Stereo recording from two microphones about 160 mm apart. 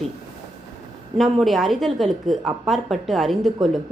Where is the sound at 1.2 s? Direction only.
Centre (ahead or behind).